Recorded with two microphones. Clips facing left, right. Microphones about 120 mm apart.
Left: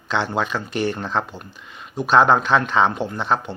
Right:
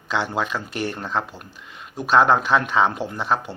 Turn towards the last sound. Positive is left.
turn(degrees=-5)  # may be behind; listen again after turning